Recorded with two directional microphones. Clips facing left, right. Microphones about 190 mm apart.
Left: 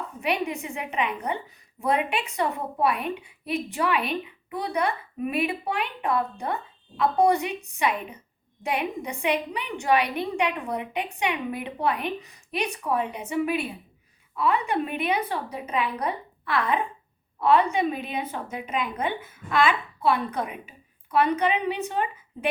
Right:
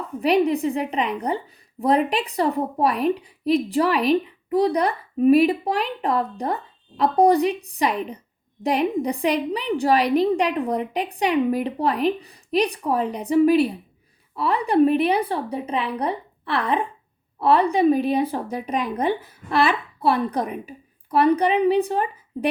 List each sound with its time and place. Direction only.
0.2 s a woman's voice: 35° right (ahead or behind)